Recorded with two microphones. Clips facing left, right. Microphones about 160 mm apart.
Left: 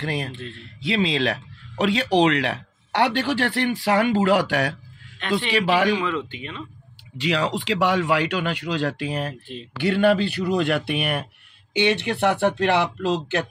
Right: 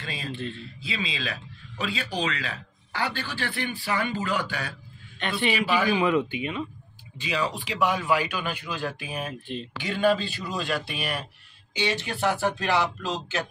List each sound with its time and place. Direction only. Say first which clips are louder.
0.0 s a man's voice: left 9 dB; 70° left (ahead or behind)
0.3 s a man's voice: right 3 dB; centre (ahead or behind)
0.6 s speech: left 10 dB; 75° left (ahead or behind)
5.5 s speech: left 4 dB; 80° left
5.9 s speech: right 3 dB; 10° right (ahead or behind)
7.2 s speech: left 5 dB; 80° left; by 13.4 s 65° left (ahead or behind)